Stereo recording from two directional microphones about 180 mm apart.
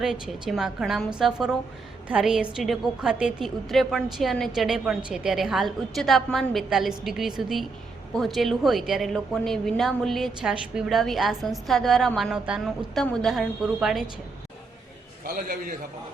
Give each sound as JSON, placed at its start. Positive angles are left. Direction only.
{"t": 0.0, "sound": "a woman's voice", "side_deg": 0}
{"t": 15.2, "sound": "a man's voice", "side_deg": -55}